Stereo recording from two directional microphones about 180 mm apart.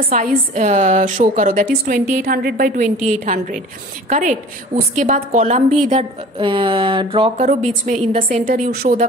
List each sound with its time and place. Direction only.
0.1 s a woman's voice: 45° right (ahead or behind)